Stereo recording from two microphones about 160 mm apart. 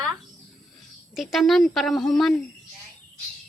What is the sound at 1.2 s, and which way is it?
Speech, centre (ahead or behind).